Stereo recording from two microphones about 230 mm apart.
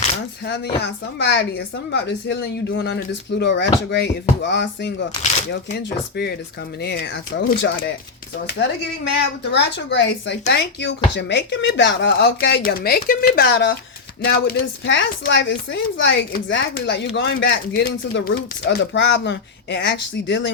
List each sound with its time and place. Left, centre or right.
0.4 s speech: left
9.4 s speech: left